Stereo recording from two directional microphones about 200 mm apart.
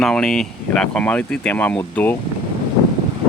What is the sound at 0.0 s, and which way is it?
Speech, 5° left (ahead or behind).